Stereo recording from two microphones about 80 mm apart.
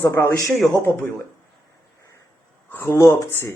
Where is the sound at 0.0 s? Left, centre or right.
Left.